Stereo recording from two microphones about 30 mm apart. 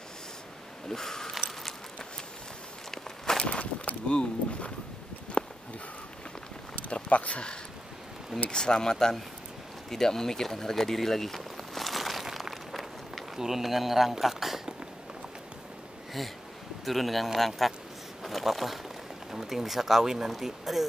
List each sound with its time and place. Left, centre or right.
0.8 s speech: centre
3.3 s walk: left
4.1 s speech: left
4.5 s a sound: left
6.9 s speech: left
8.5 s speech: left
9.8 s a sound: centre
13.4 s speech: centre
16.2 s speech: centre
18.2 s a sound: centre
19.3 s speech: centre